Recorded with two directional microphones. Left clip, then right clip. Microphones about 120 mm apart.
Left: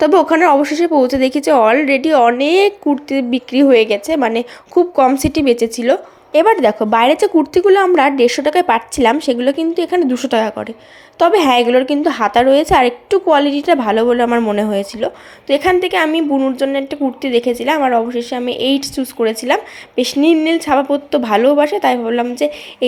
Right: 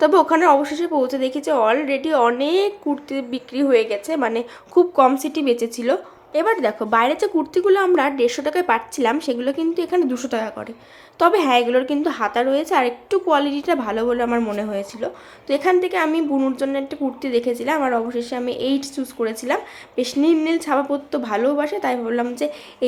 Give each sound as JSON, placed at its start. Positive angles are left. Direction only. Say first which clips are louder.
{"t": 0.0, "sound": "speech", "louder": "left 4 dB", "side_deg": 25}
{"t": 0.3, "sound": "a woman's voice", "louder": "left 4 dB", "side_deg": 40}
{"t": 5.1, "sound": "a woman's voice", "louder": "left 6 dB", "side_deg": 35}
{"t": 14.5, "sound": "a woman's voice", "louder": "left 8 dB", "side_deg": 45}
{"t": 15.4, "sound": "a woman's voice", "louder": "left 5 dB", "side_deg": 25}
{"t": 16.0, "sound": "a woman's voice", "louder": "left 5 dB", "side_deg": 15}
{"t": 16.6, "sound": "a woman's voice", "louder": "left 6 dB", "side_deg": 30}